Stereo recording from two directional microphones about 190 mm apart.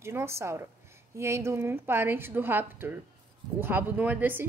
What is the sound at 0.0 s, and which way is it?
A woman's voice, 15° right (ahead or behind).